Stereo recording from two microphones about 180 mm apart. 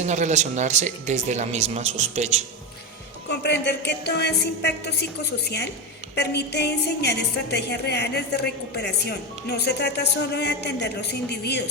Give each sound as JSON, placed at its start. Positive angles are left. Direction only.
{"t": 0.0, "sound": "speech", "side_deg": -40}
{"t": 3.2, "sound": "a woman's voice", "side_deg": 70}